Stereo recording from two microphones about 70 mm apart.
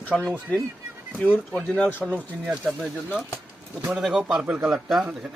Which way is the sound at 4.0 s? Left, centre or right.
Centre.